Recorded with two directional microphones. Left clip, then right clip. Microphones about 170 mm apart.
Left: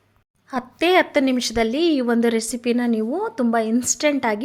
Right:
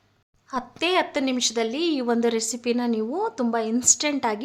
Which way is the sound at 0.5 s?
30° left (ahead or behind).